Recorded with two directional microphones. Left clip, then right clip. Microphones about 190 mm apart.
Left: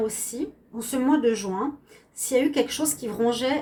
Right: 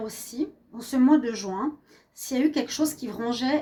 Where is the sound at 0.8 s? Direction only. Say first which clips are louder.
Right 1 dB; 35° right (ahead or behind).